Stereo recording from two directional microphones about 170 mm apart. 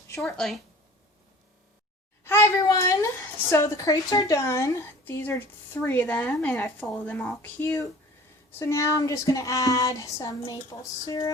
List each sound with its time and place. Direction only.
0.2 s speech: centre (ahead or behind)
2.2 s child singing: 15° left (ahead or behind)
3.5 s a woman's voice: 20° left (ahead or behind)
8.5 s child singing: 15° left (ahead or behind)